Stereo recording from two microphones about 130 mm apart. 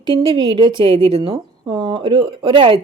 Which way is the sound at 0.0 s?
40° right (ahead or behind).